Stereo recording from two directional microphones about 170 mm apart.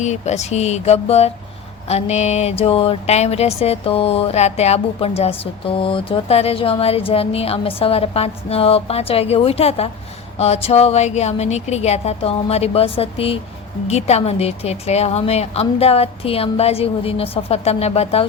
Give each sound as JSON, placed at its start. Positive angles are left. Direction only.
{"t": 0.0, "sound": "speech", "side_deg": 40}